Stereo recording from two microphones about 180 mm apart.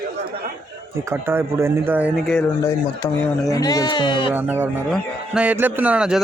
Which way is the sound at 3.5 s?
20° left (ahead or behind).